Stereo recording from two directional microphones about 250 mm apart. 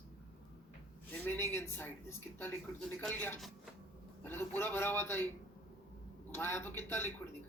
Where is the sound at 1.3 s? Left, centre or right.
Centre.